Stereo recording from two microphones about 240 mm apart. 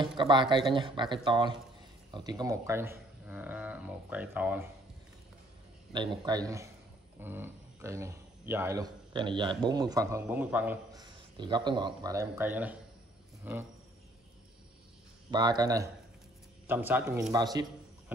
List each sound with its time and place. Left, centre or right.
0.0 s speech: centre
5.9 s a man's voice: centre
15.3 s a man's voice: centre
17.3 s a sound: centre